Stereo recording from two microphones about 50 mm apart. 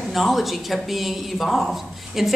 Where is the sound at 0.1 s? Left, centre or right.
Centre.